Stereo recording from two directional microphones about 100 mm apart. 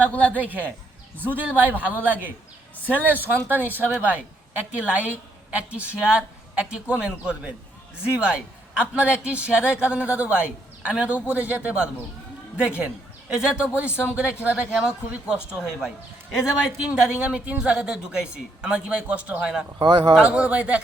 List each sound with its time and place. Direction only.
0.0 s a woman's voice: 15° left (ahead or behind)
0.3 s a man's voice: 15° right (ahead or behind)
19.8 s speech: 45° right (ahead or behind)
20.1 s a man's voice: 10° right (ahead or behind)